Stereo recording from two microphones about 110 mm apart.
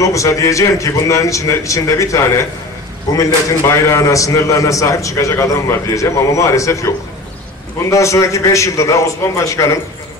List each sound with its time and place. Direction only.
0.0 s a man's voice: 30° left (ahead or behind)
7.9 s a man's voice: 30° left (ahead or behind)